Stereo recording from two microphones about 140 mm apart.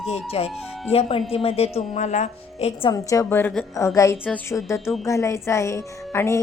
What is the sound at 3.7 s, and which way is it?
A woman's voice, 20° left (ahead or behind).